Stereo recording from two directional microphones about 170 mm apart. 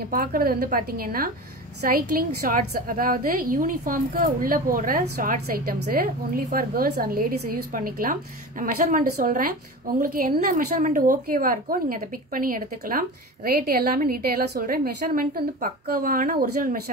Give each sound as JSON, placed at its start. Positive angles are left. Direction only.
{"t": 0.1, "sound": "a woman's voice", "side_deg": -55}